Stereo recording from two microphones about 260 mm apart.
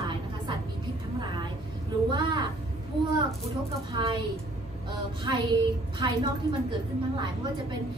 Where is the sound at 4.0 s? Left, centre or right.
Centre.